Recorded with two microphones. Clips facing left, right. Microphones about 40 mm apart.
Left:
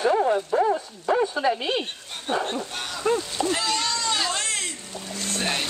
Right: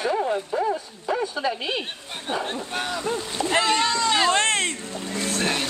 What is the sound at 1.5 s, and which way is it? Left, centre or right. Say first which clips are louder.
Speech: left 2 dB; centre.